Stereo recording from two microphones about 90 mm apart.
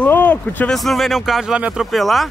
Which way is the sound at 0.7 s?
Centre (ahead or behind).